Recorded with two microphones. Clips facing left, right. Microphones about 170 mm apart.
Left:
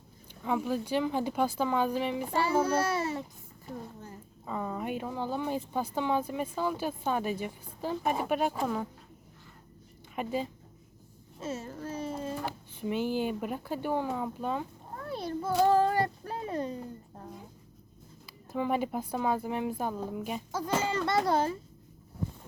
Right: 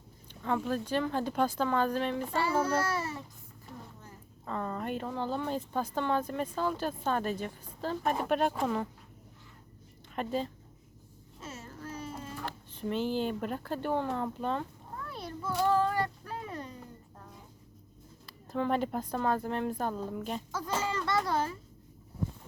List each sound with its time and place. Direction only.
0.4 s speech: 10° left (ahead or behind)
4.4 s speech: 10° left (ahead or behind)
10.2 s speech: 10° left (ahead or behind)
11.3 s a sound: 25° left (ahead or behind)
12.5 s speech: 10° left (ahead or behind)
15.1 s child singing: 35° left (ahead or behind)
18.5 s speech: 10° left (ahead or behind)
20.8 s a child's voice: 25° left (ahead or behind)